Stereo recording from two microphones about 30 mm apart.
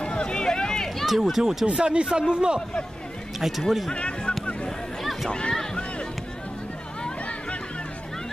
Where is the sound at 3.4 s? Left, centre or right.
Centre.